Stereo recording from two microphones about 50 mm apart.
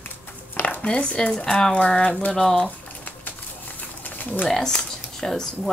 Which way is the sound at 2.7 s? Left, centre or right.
Left.